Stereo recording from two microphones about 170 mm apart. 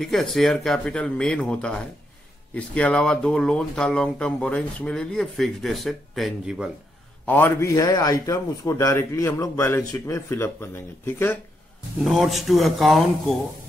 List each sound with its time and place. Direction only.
0.0 s speech: centre (ahead or behind)
7.2 s a man's voice: 10° left (ahead or behind)
12.0 s speech: centre (ahead or behind)